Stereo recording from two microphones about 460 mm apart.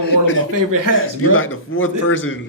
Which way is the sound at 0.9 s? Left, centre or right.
Left.